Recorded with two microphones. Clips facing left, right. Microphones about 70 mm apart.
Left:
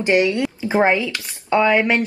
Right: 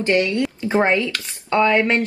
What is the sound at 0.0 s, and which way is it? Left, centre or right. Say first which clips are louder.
Speech: left 2 dB; centre.